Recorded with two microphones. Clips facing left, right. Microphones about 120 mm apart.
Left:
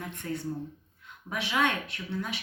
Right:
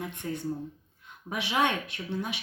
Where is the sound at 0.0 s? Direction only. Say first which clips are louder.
Right 1 dB; 15° right (ahead or behind).